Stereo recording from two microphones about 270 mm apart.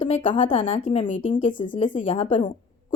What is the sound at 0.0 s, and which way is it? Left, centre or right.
A woman's voice, centre.